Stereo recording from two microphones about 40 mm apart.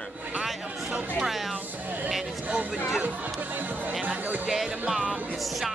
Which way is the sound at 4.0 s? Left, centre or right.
Right.